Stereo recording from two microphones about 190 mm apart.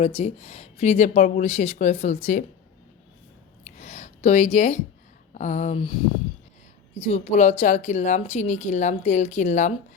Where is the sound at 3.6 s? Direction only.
35° left (ahead or behind).